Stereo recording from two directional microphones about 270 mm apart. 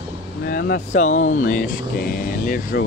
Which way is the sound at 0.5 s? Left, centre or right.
Left.